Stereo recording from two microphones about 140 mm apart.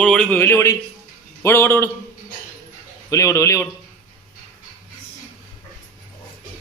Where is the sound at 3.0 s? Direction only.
25° left (ahead or behind).